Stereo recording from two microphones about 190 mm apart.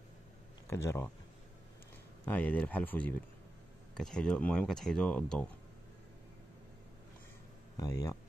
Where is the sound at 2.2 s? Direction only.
10° left (ahead or behind).